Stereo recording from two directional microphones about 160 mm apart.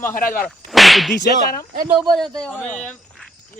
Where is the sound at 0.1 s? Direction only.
60° left (ahead or behind).